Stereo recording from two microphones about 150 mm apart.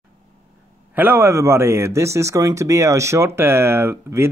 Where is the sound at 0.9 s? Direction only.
15° right (ahead or behind).